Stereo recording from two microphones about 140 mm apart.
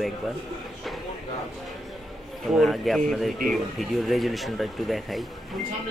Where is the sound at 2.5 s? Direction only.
Centre (ahead or behind).